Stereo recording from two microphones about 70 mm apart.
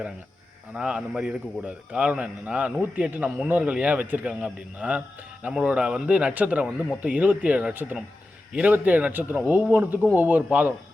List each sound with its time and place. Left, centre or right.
0.7 s speech: centre